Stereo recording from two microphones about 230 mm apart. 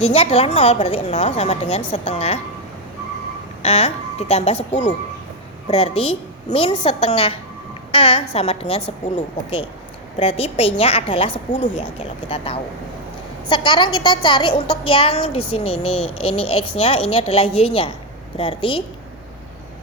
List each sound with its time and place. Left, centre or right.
0.0 s a woman's voice: left
3.6 s a woman's voice: left
15.7 s speech: left
16.2 s a woman's voice: left